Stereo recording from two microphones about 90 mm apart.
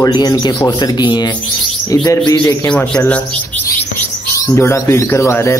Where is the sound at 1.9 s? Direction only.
40° left (ahead or behind).